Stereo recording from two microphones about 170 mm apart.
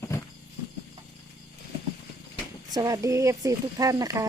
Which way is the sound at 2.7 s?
20° right (ahead or behind).